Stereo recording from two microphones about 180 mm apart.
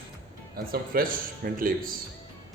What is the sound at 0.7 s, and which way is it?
Speech, 55° right (ahead or behind).